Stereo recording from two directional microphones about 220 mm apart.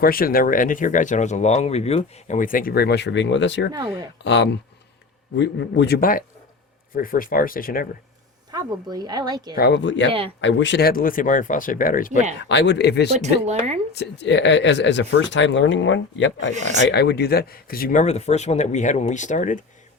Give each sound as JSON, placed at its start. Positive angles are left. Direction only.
{"t": 0.0, "sound": "speech", "side_deg": 40}
{"t": 8.4, "sound": "speech", "side_deg": -20}
{"t": 9.6, "sound": "speech", "side_deg": 50}
{"t": 10.1, "sound": "speech", "side_deg": -25}
{"t": 10.4, "sound": "speech", "side_deg": 55}
{"t": 12.5, "sound": "speech", "side_deg": 50}
{"t": 13.4, "sound": "speech", "side_deg": -30}
{"t": 13.9, "sound": "speech", "side_deg": 50}